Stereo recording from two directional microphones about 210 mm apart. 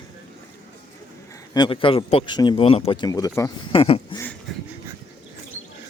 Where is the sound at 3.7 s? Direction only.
25° left (ahead or behind).